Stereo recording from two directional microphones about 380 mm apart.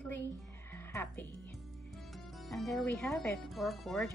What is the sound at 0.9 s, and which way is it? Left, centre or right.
Speech, centre.